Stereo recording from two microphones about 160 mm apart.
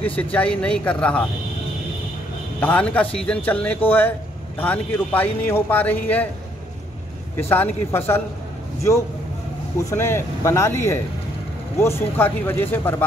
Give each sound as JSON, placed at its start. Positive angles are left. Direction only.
{"t": 0.0, "sound": "a man's voice", "side_deg": 10}
{"t": 2.6, "sound": "a man's voice", "side_deg": 10}
{"t": 7.3, "sound": "a man's voice", "side_deg": 15}
{"t": 9.8, "sound": "a man's voice", "side_deg": 15}